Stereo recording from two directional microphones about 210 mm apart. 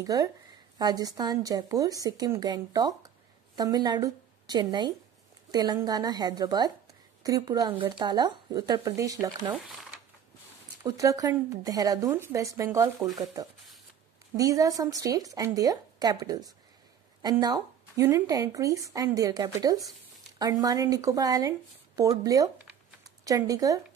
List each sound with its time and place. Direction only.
0.0 s a woman's voice: 15° right (ahead or behind)
10.8 s speech: 15° right (ahead or behind)
14.3 s speech: 15° right (ahead or behind)